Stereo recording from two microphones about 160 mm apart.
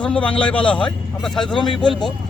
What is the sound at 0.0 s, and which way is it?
A man's voice, 5° left (ahead or behind).